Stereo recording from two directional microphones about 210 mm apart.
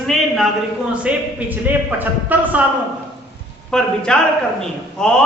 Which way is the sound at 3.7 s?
5° left (ahead or behind).